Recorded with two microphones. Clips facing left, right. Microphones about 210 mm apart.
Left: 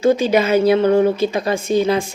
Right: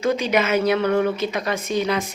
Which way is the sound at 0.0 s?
30° left (ahead or behind).